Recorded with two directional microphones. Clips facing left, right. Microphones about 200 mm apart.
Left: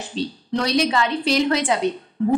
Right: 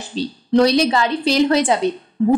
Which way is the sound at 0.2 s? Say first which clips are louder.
Right 9 dB; 35° right (ahead or behind).